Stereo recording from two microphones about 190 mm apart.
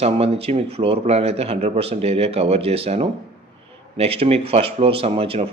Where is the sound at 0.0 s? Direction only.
30° right (ahead or behind).